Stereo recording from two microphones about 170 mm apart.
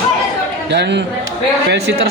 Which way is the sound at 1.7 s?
80° right.